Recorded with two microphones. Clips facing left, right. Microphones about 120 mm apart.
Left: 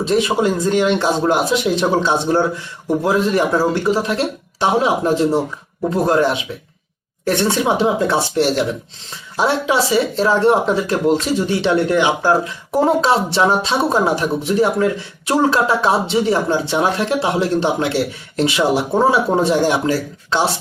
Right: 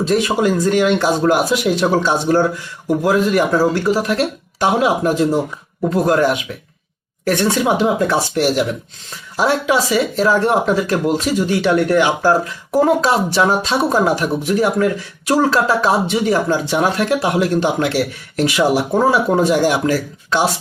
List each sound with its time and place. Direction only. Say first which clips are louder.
0.0 s speech: even; 25° left (ahead or behind)